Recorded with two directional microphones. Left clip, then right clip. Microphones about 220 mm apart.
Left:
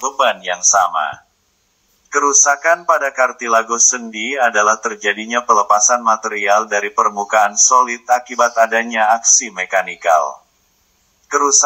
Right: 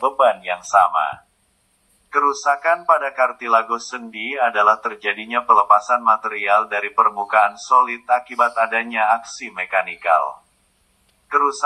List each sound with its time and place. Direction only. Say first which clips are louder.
0.0 s a man's voice: even; 35° left (ahead or behind)